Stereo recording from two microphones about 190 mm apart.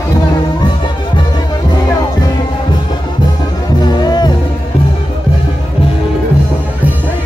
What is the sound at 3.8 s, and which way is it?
Music, 20° left (ahead or behind).